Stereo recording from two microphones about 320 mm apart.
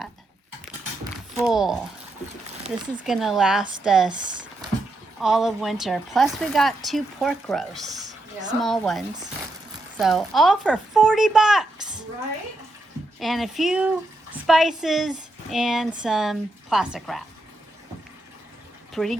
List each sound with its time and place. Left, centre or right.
1.4 s a woman's voice: centre
5.2 s a woman's voice: centre
8.0 s a sound: right
8.6 s a woman's voice: centre
13.1 s a woman's voice: centre
19.0 s a woman's voice: centre